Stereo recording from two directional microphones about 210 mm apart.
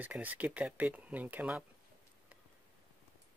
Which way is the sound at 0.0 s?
10° right (ahead or behind).